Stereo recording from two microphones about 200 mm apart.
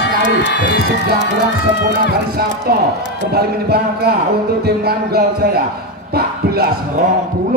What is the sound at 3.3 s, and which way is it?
Speech, 50° right (ahead or behind).